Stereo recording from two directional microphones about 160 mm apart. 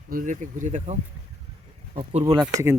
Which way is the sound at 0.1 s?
55° right (ahead or behind).